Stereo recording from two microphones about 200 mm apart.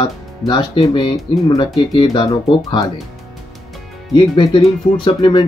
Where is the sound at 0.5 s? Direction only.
20° left (ahead or behind).